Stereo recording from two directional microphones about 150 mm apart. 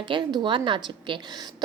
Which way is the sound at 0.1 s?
30° right (ahead or behind).